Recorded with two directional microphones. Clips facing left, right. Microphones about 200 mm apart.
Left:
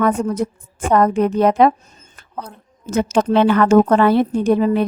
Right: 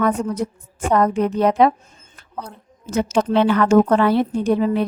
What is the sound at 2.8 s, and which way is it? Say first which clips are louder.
A woman's voice: left 2 dB; 50° left (ahead or behind).